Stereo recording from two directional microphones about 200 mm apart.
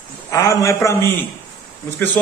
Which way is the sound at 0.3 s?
15° left (ahead or behind).